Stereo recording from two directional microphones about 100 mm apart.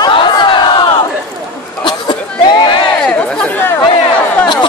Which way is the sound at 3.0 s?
10° left (ahead or behind).